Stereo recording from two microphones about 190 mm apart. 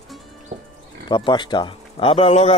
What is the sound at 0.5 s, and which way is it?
Sheep, 50° right (ahead or behind).